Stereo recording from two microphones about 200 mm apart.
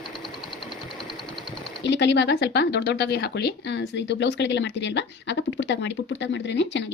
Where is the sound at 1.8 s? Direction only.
60° left (ahead or behind).